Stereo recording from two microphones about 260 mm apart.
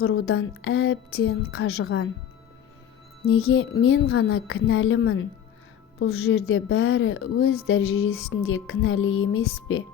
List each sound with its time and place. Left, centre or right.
0.0 s a woman's voice: left
3.2 s a woman's voice: left